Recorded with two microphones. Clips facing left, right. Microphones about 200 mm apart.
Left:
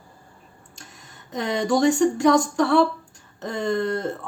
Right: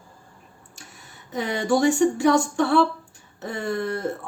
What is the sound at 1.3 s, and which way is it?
Speech, 5° right (ahead or behind).